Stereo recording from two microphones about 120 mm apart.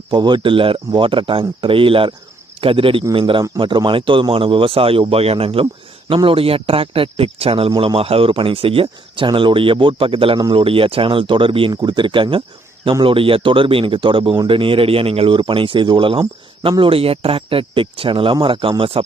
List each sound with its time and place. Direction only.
0.1 s speech: 40° right (ahead or behind)
11.7 s speech: 35° right (ahead or behind)